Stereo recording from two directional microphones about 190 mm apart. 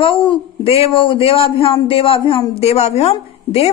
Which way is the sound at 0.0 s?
25° left (ahead or behind).